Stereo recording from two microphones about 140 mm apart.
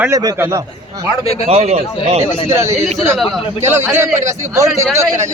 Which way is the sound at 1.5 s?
45° right (ahead or behind).